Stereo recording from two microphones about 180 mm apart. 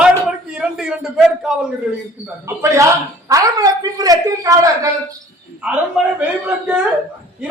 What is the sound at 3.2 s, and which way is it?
A man's voice, 20° right (ahead or behind).